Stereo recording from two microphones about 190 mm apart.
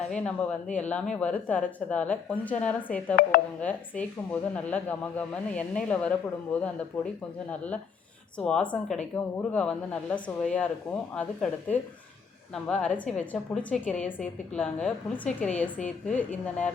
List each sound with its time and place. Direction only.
0.1 s a woman's voice: 5° left (ahead or behind)
3.2 s speech: 50° left (ahead or behind)
3.6 s a woman's voice: 10° left (ahead or behind)
8.4 s a woman's voice: 5° left (ahead or behind)